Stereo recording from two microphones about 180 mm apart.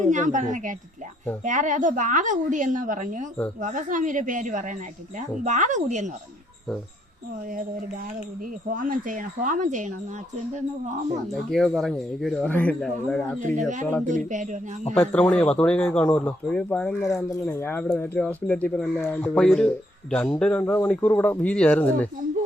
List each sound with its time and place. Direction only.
0.0 s a woman's voice: 45° right (ahead or behind)
8.7 s a woman's voice: 50° right (ahead or behind)
11.3 s speech: centre (ahead or behind)
13.4 s a woman's voice: 45° right (ahead or behind)
14.9 s speech: 5° left (ahead or behind)
17.1 s speech: 20° left (ahead or behind)